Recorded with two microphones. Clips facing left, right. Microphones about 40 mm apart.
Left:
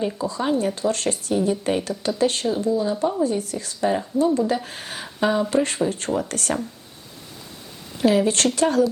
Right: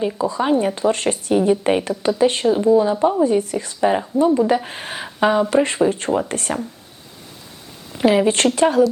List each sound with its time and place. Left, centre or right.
0.0 s speech: centre
7.9 s speech: right